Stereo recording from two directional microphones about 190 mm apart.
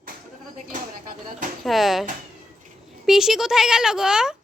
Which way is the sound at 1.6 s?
Centre (ahead or behind).